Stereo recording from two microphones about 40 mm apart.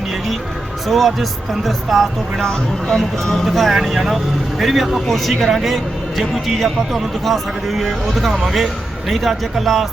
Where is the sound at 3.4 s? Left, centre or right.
Centre.